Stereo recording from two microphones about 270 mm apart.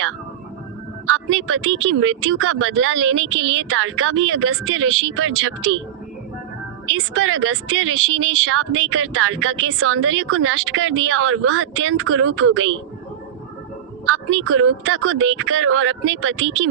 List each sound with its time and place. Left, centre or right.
1.0 s speech: right
3.2 s speech: right
3.7 s speech: right
6.9 s speech: right
14.4 s speech: right